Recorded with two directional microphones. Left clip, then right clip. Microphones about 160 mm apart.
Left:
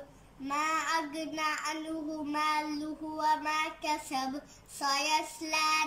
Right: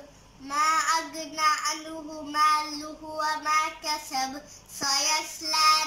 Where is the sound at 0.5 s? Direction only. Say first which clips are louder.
Right 7 dB; 10° left (ahead or behind).